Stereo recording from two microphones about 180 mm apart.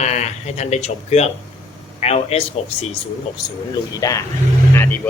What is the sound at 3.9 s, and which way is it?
Speech, 20° left (ahead or behind).